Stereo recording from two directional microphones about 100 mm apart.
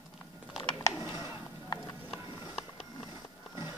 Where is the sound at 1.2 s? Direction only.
40° left (ahead or behind).